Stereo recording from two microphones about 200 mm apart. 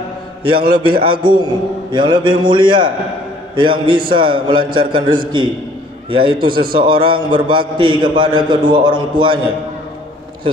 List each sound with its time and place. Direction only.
0.6 s a man's voice: 50° right (ahead or behind)
1.0 s a man's voice: 25° right (ahead or behind)